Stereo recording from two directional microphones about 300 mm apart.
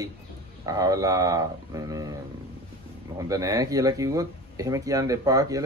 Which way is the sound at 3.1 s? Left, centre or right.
Centre.